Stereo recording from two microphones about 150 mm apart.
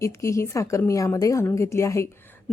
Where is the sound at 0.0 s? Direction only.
20° left (ahead or behind).